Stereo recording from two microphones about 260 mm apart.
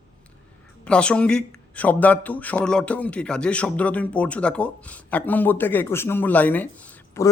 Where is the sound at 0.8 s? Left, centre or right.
Centre.